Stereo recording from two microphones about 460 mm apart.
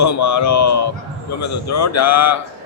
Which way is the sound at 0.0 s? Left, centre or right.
Left.